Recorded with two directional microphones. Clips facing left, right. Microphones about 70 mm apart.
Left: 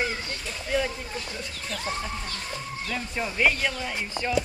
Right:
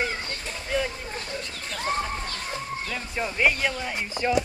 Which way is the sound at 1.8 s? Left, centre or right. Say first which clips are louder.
Right 6 dB; right.